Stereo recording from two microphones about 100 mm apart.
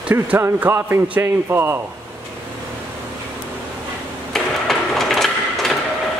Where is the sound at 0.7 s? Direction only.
25° right (ahead or behind).